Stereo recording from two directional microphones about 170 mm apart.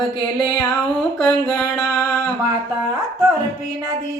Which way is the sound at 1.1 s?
10° left (ahead or behind).